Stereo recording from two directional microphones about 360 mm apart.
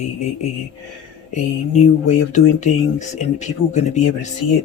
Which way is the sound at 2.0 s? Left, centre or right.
Centre.